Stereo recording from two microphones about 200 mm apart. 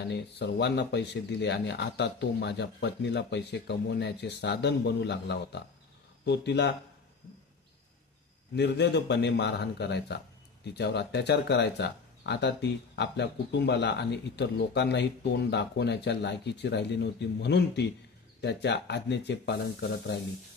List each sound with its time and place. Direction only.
0.1 s speech: 55° left (ahead or behind)
8.5 s speech: 60° left (ahead or behind)